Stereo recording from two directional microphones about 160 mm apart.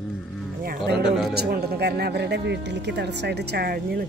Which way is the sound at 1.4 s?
80° right.